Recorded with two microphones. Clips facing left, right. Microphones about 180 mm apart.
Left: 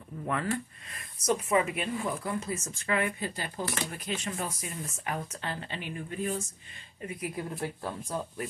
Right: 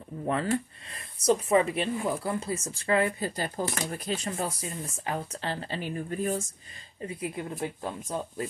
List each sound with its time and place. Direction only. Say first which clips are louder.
0.2 s speech: right 4 dB; 30° right (ahead or behind)
7.0 s speech: right 2 dB; 30° right (ahead or behind)